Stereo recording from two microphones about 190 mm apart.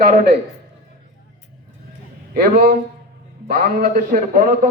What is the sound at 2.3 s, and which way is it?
A man's voice, 50° right (ahead or behind).